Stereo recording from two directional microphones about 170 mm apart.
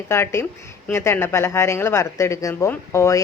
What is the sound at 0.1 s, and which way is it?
Speech, 15° left (ahead or behind).